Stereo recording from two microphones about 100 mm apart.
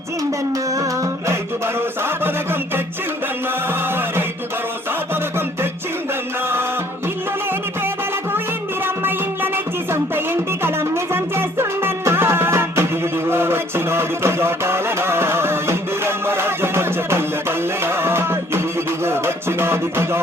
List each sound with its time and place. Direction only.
1.3 s a sound: 25° right (ahead or behind)
3.7 s music: 20° right (ahead or behind)
8.8 s music: 20° right (ahead or behind)